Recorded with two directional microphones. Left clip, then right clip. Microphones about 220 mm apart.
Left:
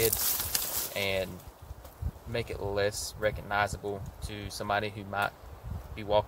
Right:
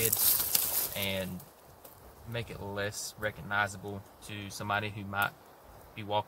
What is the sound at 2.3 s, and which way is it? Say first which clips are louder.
Speech: left 6 dB; 30° left (ahead or behind).